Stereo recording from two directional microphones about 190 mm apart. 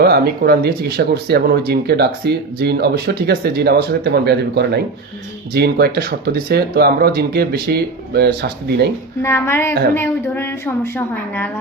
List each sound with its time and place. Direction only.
0.0 s speech: 55° right (ahead or behind)
9.2 s a woman's voice: 15° left (ahead or behind)